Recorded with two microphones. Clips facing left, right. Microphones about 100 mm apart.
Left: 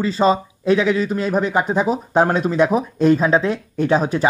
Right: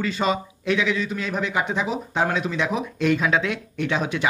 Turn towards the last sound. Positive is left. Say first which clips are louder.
# left 7 dB
turn(degrees=35)  # may be behind; listen again after turning